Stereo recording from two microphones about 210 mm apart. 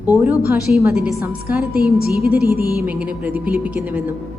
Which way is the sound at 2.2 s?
45° right (ahead or behind).